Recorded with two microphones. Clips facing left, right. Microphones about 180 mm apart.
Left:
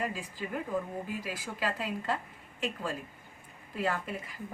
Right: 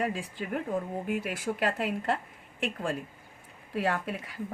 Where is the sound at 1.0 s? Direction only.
65° right (ahead or behind).